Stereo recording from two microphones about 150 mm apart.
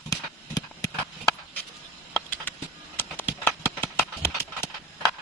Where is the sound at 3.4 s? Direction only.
15° left (ahead or behind).